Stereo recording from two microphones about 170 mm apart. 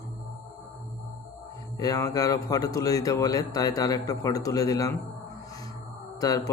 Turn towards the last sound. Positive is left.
turn(degrees=20)  # may be behind; listen again after turning